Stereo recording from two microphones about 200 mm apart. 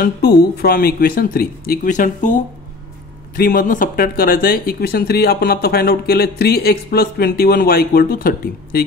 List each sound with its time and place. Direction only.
0.0 s speech: 50° left (ahead or behind)
3.3 s speech: 45° left (ahead or behind)